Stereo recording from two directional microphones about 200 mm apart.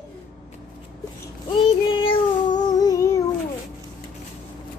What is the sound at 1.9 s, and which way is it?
Child singing, 25° left (ahead or behind).